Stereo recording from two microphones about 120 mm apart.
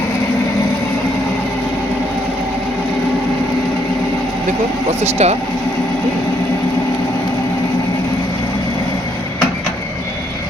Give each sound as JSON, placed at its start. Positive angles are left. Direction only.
{"t": 5.1, "sound": "speech", "side_deg": -65}